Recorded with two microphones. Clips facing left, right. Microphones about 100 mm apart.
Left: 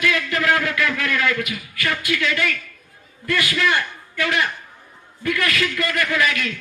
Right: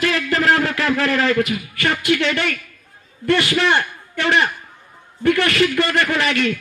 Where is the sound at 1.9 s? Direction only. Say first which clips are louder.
Right 5 dB; 65° right (ahead or behind).